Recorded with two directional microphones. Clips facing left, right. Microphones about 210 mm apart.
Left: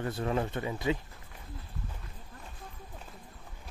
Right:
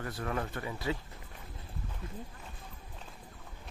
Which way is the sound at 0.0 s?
25° left (ahead or behind).